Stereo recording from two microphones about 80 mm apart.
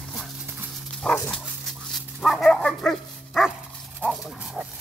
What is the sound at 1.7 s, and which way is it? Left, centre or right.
Dog, centre.